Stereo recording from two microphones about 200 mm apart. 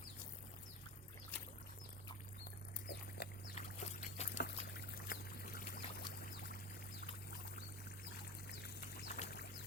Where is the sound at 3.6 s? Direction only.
35° left (ahead or behind).